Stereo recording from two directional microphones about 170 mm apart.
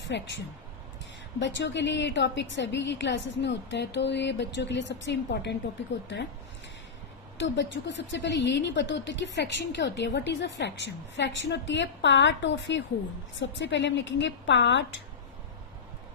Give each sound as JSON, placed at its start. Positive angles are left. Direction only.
{"t": 0.1, "sound": "a woman's voice", "side_deg": 90}
{"t": 1.4, "sound": "a woman's voice", "side_deg": 90}
{"t": 7.3, "sound": "a woman's voice", "side_deg": 90}